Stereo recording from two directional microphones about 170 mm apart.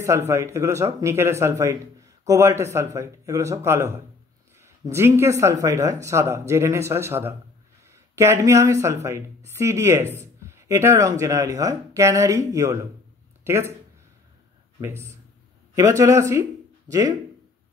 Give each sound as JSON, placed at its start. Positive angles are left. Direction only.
{"t": 0.3, "sound": "a man's voice", "side_deg": -15}
{"t": 14.8, "sound": "a man's voice", "side_deg": -15}